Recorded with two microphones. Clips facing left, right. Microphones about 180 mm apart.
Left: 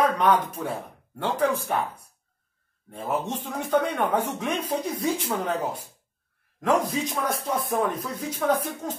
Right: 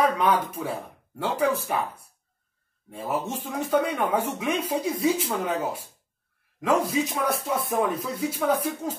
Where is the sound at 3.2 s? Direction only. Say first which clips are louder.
Right 1 dB; 10° right (ahead or behind).